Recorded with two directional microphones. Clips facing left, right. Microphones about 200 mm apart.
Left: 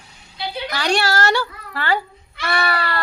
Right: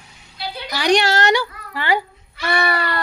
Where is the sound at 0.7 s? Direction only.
15° right (ahead or behind).